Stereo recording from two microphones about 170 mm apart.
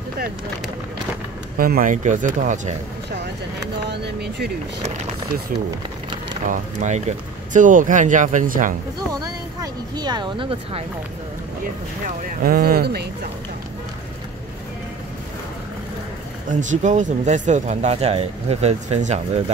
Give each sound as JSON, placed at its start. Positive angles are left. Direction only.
{"t": 1.6, "sound": "speech", "side_deg": -55}
{"t": 3.9, "sound": "speech", "side_deg": -80}
{"t": 6.4, "sound": "speech", "side_deg": -45}
{"t": 9.6, "sound": "speech", "side_deg": -25}
{"t": 12.2, "sound": "speech", "side_deg": -55}
{"t": 16.4, "sound": "speech", "side_deg": -45}